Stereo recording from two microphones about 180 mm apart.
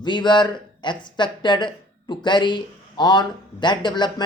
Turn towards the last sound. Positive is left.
turn(degrees=25)  # may be behind; listen again after turning